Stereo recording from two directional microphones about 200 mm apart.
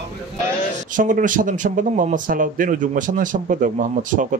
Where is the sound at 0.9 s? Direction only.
40° right (ahead or behind).